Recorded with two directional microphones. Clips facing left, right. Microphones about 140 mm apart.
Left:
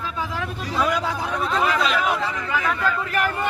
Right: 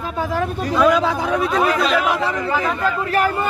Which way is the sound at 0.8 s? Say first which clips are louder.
Right 7 dB; 90° right.